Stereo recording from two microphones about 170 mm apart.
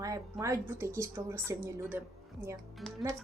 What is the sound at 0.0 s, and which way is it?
A woman's voice, 20° right (ahead or behind).